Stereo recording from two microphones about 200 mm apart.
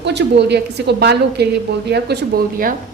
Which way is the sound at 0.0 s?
60° right (ahead or behind).